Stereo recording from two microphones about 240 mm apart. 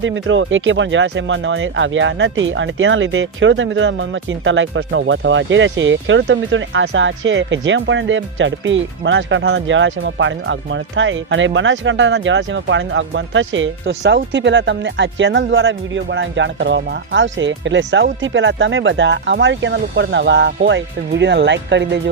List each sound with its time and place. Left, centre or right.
0.0 s speech: right